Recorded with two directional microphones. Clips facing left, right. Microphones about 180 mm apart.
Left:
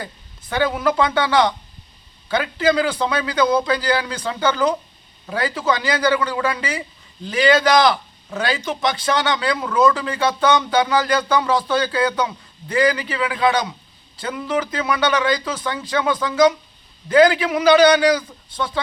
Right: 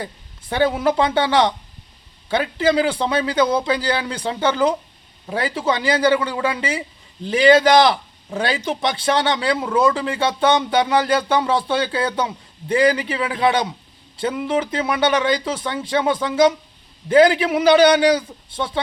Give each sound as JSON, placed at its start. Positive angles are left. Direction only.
{"t": 0.5, "sound": "a man's voice", "side_deg": -25}